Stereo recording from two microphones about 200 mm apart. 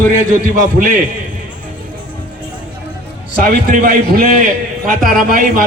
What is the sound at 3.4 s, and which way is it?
A man's voice, 45° right (ahead or behind).